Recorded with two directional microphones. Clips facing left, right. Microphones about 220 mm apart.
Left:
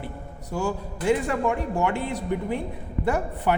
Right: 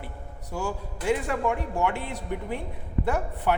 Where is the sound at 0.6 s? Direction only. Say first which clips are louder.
Left 4 dB; 5° right (ahead or behind).